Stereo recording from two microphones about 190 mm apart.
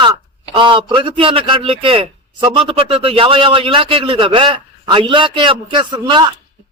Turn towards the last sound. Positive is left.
turn(degrees=-25)  # may be behind; listen again after turning